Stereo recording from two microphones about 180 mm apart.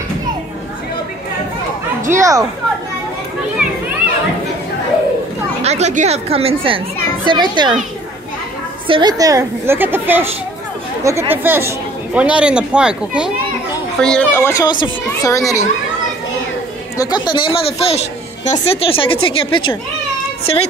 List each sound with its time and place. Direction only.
2.0 s speech: 15° right (ahead or behind)
5.6 s a child's voice: 40° right (ahead or behind)
8.8 s speech: 25° right (ahead or behind); by 14.2 s 5° left (ahead or behind)
14.3 s a child's voice: 15° left (ahead or behind)
16.9 s a child's voice: 20° left (ahead or behind)